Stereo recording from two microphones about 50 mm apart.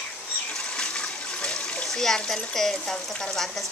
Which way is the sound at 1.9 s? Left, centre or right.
Centre.